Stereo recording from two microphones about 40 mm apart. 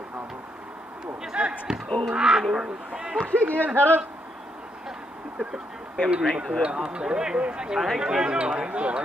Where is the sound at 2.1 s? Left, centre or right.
Centre.